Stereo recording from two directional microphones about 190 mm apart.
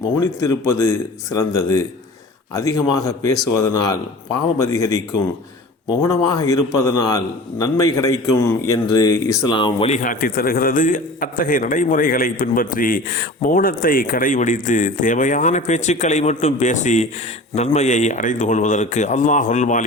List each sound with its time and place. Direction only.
0.2 s speech: 15° left (ahead or behind)
6.0 s speech: 20° left (ahead or behind)
9.9 s a man's voice: 45° left (ahead or behind)